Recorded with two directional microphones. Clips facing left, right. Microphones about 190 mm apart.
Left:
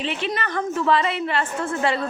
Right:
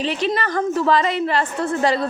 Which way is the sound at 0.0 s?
35° right (ahead or behind).